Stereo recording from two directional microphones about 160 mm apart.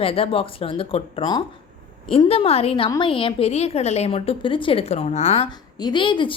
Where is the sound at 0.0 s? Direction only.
35° left (ahead or behind).